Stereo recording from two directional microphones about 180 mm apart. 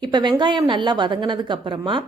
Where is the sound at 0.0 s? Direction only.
25° right (ahead or behind).